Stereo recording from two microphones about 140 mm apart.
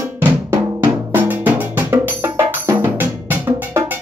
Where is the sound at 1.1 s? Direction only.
10° right (ahead or behind).